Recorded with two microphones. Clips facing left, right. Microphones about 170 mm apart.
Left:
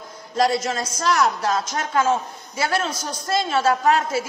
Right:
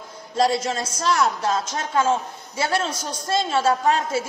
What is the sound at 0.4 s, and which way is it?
A woman's voice, 30° right (ahead or behind).